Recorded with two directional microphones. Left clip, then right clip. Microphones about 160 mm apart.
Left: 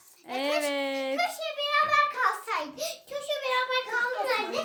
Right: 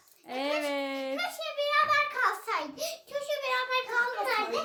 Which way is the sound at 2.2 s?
5° right (ahead or behind).